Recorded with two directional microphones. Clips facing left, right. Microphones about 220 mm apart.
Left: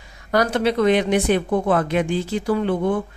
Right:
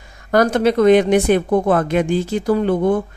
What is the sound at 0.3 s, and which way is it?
Speech, 45° right (ahead or behind).